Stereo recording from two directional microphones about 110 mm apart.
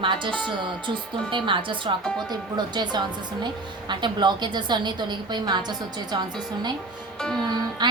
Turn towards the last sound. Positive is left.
turn(degrees=-40)  # may be behind; listen again after turning